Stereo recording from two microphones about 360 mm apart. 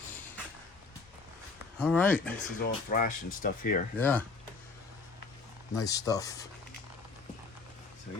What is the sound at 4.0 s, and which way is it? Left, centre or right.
Speech, centre.